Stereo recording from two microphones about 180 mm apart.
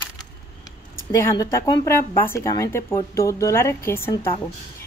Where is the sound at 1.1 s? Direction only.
15° left (ahead or behind).